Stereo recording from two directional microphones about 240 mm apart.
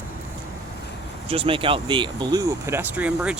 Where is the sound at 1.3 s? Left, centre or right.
Right.